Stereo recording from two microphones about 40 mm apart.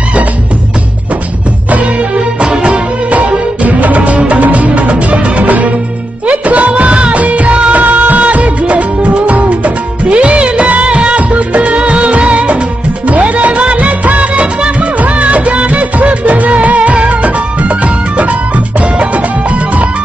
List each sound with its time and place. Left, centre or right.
2.1 s music: right
3.1 s music: right
6.2 s music of bollywood: right
7.7 s music of bollywood: right
13.1 s music: right
14.4 s music of bollywood: right